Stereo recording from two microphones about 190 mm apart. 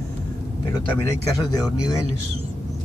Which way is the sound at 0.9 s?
15° left (ahead or behind).